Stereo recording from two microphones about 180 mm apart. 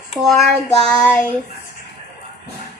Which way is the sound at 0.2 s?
Centre (ahead or behind).